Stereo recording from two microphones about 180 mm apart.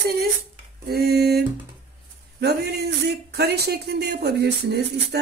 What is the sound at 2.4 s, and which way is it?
Speech, 65° right (ahead or behind).